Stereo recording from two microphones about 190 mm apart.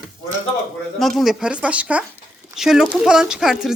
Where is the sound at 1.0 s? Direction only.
Centre (ahead or behind).